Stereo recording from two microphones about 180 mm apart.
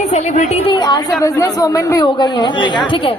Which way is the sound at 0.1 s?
35° left (ahead or behind).